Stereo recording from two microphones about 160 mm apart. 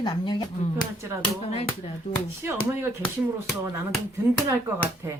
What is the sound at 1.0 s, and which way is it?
Speech, 15° right (ahead or behind).